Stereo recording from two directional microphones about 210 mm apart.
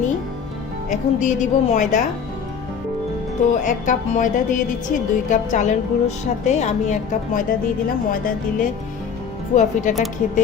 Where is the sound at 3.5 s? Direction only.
35° left (ahead or behind).